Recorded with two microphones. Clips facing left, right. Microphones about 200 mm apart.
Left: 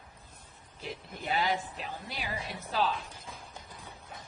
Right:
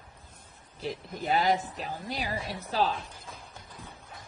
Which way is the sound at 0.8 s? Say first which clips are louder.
Right 6 dB; 35° right (ahead or behind).